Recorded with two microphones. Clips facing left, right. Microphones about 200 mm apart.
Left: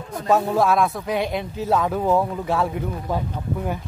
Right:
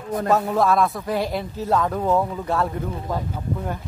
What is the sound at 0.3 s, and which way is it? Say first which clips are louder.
A man's voice: left 1 dB; centre (ahead or behind).